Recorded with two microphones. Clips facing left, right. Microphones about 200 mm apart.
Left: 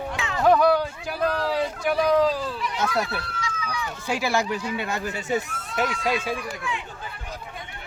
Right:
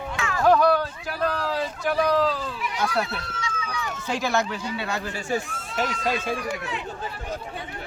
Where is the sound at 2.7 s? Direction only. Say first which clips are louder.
Even; 25° left (ahead or behind).